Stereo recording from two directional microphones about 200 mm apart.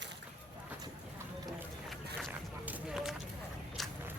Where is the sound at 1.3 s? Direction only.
15° right (ahead or behind).